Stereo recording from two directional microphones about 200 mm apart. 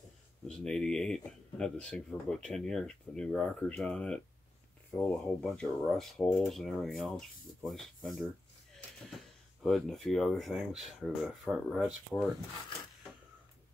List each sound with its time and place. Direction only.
0.5 s speech: 5° left (ahead or behind)
9.6 s speech: centre (ahead or behind)